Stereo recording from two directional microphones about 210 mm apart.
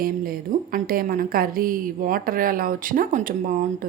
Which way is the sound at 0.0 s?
45° right (ahead or behind).